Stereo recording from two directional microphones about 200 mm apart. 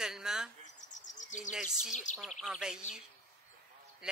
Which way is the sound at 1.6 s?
40° left (ahead or behind).